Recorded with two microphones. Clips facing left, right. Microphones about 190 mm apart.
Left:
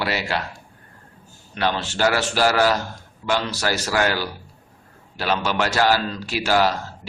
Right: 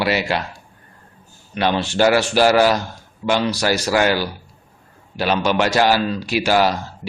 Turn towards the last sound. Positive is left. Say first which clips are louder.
# right 3 dB
turn(degrees=-15)  # may be behind; listen again after turning